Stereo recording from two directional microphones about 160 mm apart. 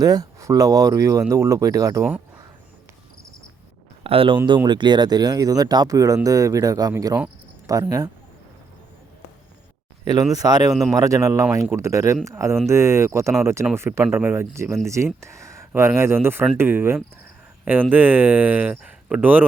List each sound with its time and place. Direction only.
0.0 s speech: 25° right (ahead or behind)
4.0 s speech: 35° right (ahead or behind)
10.0 s speech: 25° right (ahead or behind)